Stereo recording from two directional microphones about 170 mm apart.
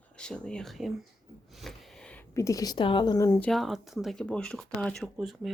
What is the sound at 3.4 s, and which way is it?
Speech, 5° left (ahead or behind).